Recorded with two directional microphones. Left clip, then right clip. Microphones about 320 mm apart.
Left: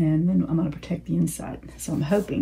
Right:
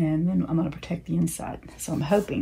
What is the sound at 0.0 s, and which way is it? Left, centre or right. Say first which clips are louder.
Speech: left 2 dB; centre.